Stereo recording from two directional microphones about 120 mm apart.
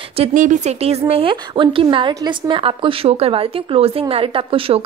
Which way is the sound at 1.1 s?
45° right (ahead or behind).